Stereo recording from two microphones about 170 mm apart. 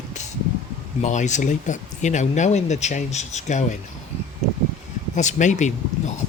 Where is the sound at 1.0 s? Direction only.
45° left (ahead or behind).